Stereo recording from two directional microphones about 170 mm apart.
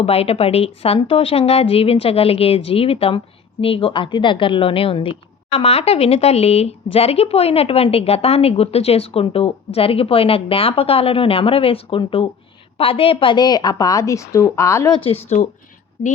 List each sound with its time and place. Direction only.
0.0 s a woman's voice: 35° left (ahead or behind); by 14.9 s 15° left (ahead or behind)
14.9 s speech: 35° left (ahead or behind)